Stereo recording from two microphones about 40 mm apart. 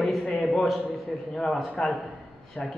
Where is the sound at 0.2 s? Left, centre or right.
Left.